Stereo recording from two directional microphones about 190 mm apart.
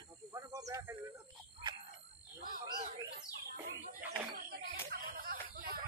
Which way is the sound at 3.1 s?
60° right (ahead or behind).